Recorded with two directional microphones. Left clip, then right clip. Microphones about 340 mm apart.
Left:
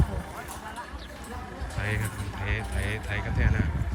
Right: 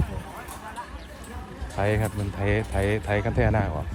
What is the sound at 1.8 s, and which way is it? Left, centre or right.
Speech, centre.